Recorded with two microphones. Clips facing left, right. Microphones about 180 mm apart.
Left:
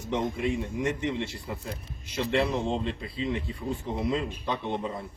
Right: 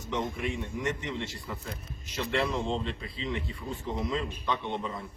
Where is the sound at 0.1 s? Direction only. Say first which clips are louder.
Left 4 dB; 25° left (ahead or behind).